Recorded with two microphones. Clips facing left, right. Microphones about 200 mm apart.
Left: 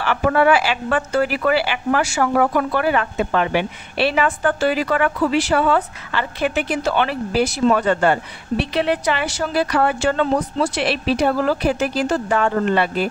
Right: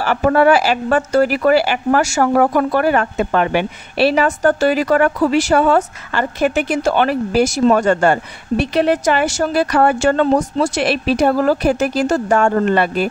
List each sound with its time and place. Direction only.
0.0 s a woman's voice: 40° right (ahead or behind)